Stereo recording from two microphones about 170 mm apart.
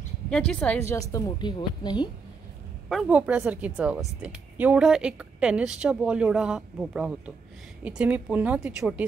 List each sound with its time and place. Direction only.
0.3 s speech: 5° left (ahead or behind)
1.1 s a woman's voice: 25° left (ahead or behind)
2.9 s a woman's voice: 5° right (ahead or behind)